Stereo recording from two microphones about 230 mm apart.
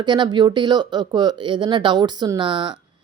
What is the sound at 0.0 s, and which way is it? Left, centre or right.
A woman's voice, centre.